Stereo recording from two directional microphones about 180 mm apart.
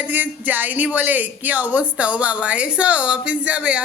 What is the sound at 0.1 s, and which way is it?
Speech, 10° right (ahead or behind).